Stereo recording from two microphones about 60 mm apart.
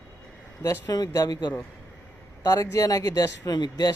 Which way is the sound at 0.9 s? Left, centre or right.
Left.